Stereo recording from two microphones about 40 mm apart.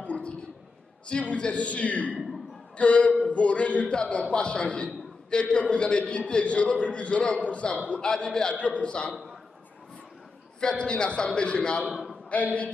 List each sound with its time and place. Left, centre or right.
0.0 s a sound: left
1.0 s a man's voice: left
8.0 s a man's voice: centre
8.5 s a man's voice: left
10.7 s a man's voice: left
11.9 s a sound: centre